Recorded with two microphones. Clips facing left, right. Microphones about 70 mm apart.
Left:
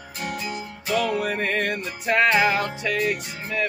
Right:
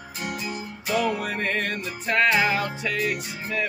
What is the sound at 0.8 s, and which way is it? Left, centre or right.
Music, centre.